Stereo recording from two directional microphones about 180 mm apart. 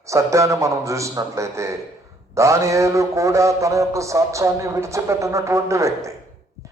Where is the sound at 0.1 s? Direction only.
15° right (ahead or behind).